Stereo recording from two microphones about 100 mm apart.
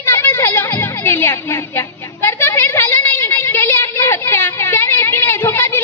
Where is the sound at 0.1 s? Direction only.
20° left (ahead or behind).